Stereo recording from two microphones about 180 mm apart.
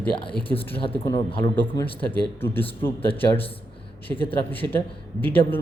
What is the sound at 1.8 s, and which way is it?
Speech, 10° left (ahead or behind).